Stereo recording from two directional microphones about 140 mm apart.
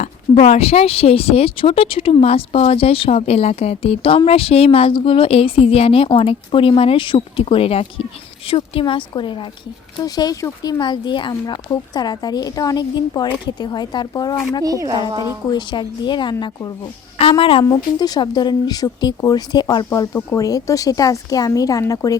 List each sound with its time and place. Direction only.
0.0 s a woman's voice: 50° left (ahead or behind); by 14.3 s 30° left (ahead or behind)
14.6 s speech: 25° right (ahead or behind)
15.4 s a woman's voice: 35° left (ahead or behind)
18.0 s speech: 30° left (ahead or behind)